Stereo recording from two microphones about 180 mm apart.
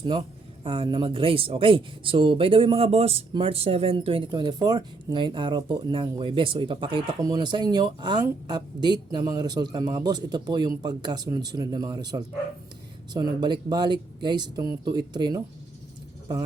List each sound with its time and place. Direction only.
0.0 s speech: 30° right (ahead or behind)